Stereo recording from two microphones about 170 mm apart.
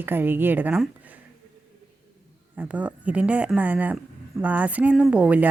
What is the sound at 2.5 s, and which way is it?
Speech, 10° right (ahead or behind).